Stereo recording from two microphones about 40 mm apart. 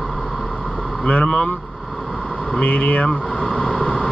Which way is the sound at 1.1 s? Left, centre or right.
Left.